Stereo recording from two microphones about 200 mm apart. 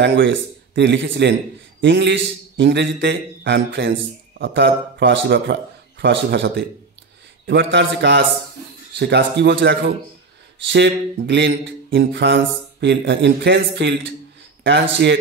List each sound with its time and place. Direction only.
0.0 s a man's voice: 60° right (ahead or behind)